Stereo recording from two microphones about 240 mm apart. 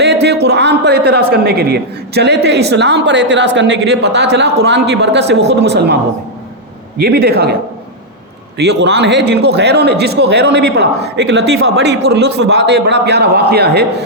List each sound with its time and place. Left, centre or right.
0.0 s a sound: right
1.3 s a man's voice: right
7.0 s speech: right
8.5 s a man's voice: right